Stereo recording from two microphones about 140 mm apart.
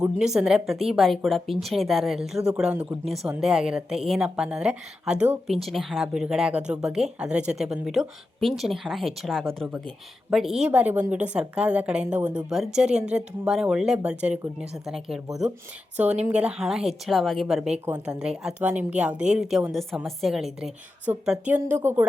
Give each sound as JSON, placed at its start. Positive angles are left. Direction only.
{"t": 0.0, "sound": "a woman's voice", "side_deg": -5}